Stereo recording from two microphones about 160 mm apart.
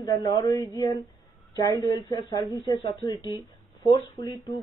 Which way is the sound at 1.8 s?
25° left (ahead or behind).